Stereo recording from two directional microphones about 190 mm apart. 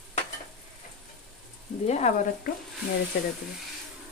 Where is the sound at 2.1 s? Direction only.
35° left (ahead or behind).